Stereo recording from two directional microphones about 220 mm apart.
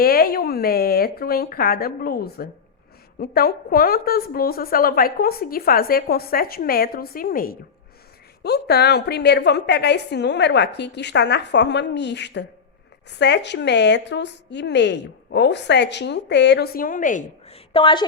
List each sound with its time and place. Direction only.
0.0 s a woman's voice: 45° left (ahead or behind)
17.7 s a woman's voice: 20° left (ahead or behind)